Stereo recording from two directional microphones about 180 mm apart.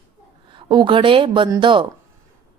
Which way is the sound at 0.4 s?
25° right (ahead or behind).